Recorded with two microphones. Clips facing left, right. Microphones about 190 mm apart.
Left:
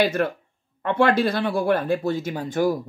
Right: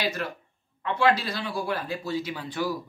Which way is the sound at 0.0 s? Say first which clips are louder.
Left 9 dB; 55° left (ahead or behind).